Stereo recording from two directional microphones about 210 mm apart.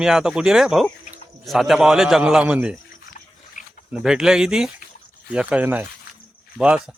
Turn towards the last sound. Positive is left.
turn(degrees=-5)  # may be behind; listen again after turning